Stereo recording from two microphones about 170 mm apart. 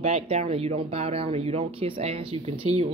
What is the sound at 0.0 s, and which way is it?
Speech, 40° right (ahead or behind).